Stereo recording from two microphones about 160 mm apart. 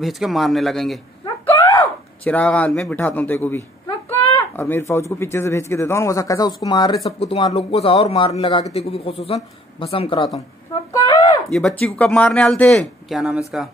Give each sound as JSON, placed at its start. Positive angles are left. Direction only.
{"t": 0.0, "sound": "speech", "side_deg": 0}
{"t": 2.2, "sound": "speech", "side_deg": 10}
{"t": 7.1, "sound": "a man's voice", "side_deg": 40}
{"t": 10.9, "sound": "a sound", "side_deg": 25}
{"t": 11.5, "sound": "speech", "side_deg": 5}